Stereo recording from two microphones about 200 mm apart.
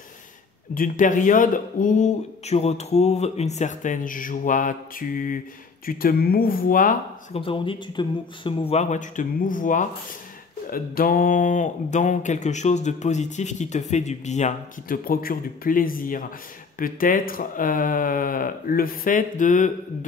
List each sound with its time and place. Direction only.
0.7 s speech: 40° left (ahead or behind)
7.3 s speech: 25° left (ahead or behind)